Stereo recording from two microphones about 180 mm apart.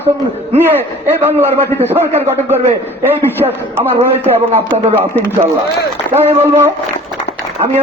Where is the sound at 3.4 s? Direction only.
30° right (ahead or behind).